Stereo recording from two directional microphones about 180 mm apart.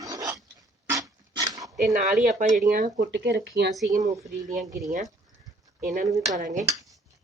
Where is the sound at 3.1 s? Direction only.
65° right (ahead or behind).